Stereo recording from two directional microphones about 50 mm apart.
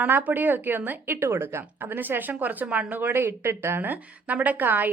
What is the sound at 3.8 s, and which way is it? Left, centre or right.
A woman's voice, right.